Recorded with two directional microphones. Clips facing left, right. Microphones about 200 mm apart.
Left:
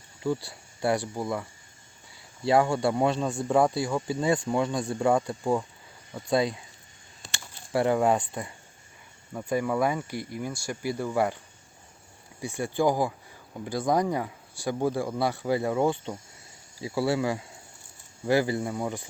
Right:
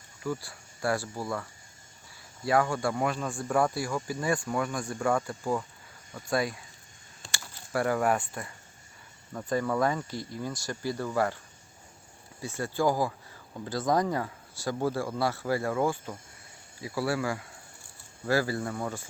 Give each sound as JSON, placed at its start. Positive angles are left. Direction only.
{"t": 0.2, "sound": "speech", "side_deg": 30}
{"t": 7.7, "sound": "speech", "side_deg": 20}
{"t": 12.4, "sound": "speech", "side_deg": 15}